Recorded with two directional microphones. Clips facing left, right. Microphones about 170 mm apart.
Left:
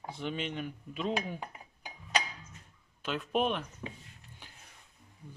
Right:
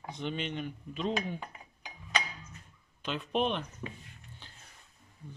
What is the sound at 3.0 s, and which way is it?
Speech, 5° left (ahead or behind).